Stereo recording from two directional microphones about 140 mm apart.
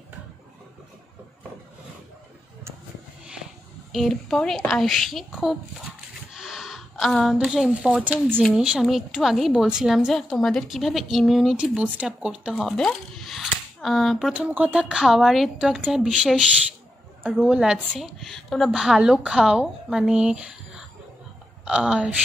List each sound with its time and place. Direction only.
3.9 s a woman's voice: centre (ahead or behind)
8.4 s a woman's voice: centre (ahead or behind)
14.3 s a woman's voice: 10° right (ahead or behind)